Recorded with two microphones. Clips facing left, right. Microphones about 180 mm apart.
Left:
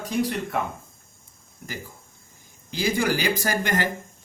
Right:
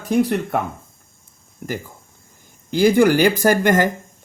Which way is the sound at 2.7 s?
55° right (ahead or behind).